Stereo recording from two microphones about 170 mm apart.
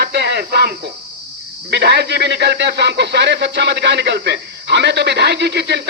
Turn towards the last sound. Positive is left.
turn(degrees=-75)  # may be behind; listen again after turning